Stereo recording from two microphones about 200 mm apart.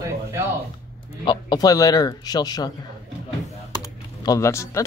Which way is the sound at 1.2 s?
20° left (ahead or behind).